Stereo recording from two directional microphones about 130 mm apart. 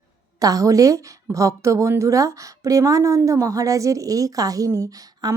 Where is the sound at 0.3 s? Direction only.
25° right (ahead or behind).